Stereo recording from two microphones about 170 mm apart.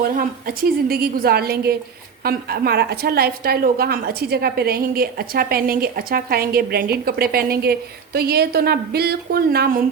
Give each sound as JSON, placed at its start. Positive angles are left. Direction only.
{"t": 0.0, "sound": "a woman's voice", "side_deg": -60}